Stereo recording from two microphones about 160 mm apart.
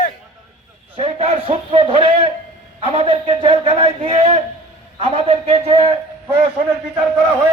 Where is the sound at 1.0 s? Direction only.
35° right (ahead or behind).